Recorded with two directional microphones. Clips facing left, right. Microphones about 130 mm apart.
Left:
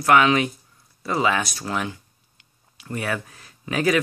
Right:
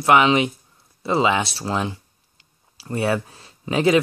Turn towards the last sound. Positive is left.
turn(degrees=-25)  # may be behind; listen again after turning